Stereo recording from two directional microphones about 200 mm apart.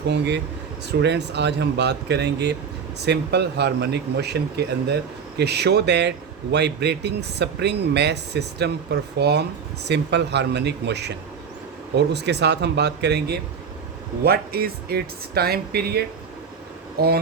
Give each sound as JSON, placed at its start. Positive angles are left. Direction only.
{"t": 0.1, "sound": "speech", "side_deg": -60}